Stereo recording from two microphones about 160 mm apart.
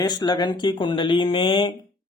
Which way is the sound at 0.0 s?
25° left (ahead or behind).